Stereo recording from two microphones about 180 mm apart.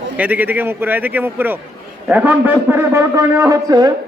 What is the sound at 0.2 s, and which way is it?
A man's voice, 10° right (ahead or behind).